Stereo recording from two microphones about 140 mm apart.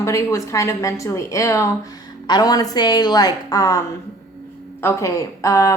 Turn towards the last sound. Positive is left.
turn(degrees=25)  # may be behind; listen again after turning